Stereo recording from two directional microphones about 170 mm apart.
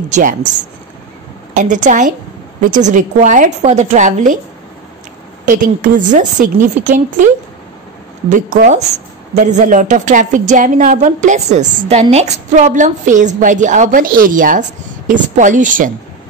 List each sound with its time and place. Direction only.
0.1 s a woman's voice: 50° right (ahead or behind)
1.5 s a woman's voice: 50° right (ahead or behind)
5.4 s a woman's voice: 50° right (ahead or behind)
8.6 s a woman's voice: 45° right (ahead or behind)